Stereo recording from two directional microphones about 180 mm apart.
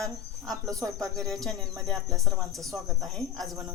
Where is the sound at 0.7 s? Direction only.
20° right (ahead or behind).